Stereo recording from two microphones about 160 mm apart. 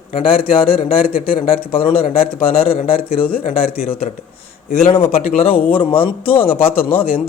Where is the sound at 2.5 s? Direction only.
65° left (ahead or behind).